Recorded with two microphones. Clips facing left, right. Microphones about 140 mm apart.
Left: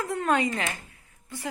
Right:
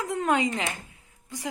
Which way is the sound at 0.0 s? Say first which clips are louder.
Even; 15° right (ahead or behind).